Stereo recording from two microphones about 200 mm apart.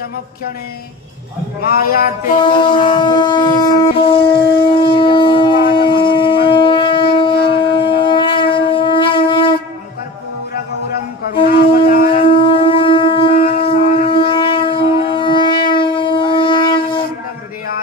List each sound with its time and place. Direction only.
1.6 s a man's voice: 50° left (ahead or behind)
2.4 s a sound: 25° left (ahead or behind)
2.8 s shofar: 20° left (ahead or behind)
7.3 s shofar: 55° left (ahead or behind)
7.6 s shofar: 25° left (ahead or behind)
11.4 s shofar: 50° left (ahead or behind)
12.3 s shofar: 25° left (ahead or behind)
13.4 s shofar: 50° left (ahead or behind)
14.1 s shofar: 25° left (ahead or behind)